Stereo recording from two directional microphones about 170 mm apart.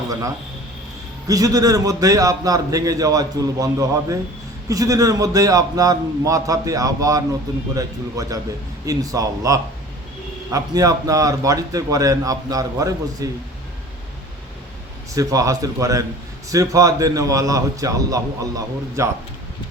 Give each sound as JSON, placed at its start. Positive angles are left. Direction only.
{"t": 0.1, "sound": "a man's voice", "side_deg": -20}
{"t": 15.1, "sound": "a man's voice", "side_deg": -20}